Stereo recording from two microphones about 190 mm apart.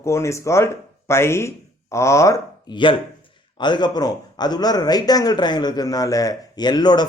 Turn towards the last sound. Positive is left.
turn(degrees=20)  # may be behind; listen again after turning